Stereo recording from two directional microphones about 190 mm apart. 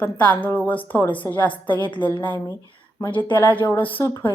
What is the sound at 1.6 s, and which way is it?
Speech, 25° left (ahead or behind).